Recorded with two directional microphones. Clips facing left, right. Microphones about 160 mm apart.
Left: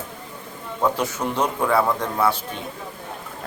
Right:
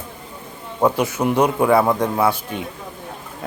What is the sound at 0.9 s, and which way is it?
Speech, 10° right (ahead or behind).